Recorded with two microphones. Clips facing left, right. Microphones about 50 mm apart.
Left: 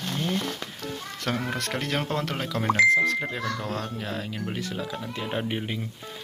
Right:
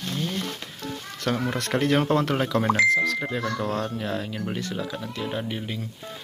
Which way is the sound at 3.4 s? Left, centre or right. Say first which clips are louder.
Right 3 dB; centre.